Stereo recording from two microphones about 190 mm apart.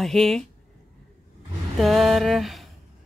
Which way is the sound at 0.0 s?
Centre (ahead or behind).